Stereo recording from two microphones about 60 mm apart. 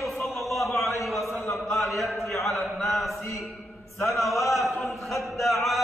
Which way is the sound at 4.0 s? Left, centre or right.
Left.